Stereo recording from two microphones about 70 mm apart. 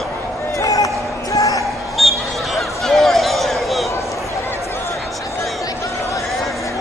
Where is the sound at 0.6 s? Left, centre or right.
Left.